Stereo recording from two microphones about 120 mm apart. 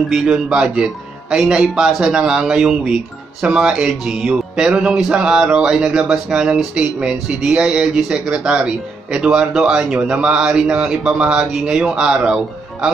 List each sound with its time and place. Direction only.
0.1 s speech: 5° right (ahead or behind)